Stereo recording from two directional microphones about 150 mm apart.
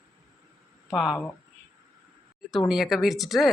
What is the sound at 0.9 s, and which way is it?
Speech, 5° right (ahead or behind).